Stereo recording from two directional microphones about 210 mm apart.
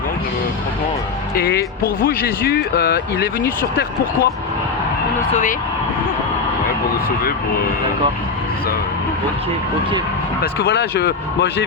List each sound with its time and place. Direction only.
1.4 s speech: 50° left (ahead or behind)
10.4 s speech: 50° left (ahead or behind)